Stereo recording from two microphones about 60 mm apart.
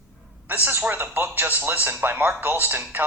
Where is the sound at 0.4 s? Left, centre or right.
Right.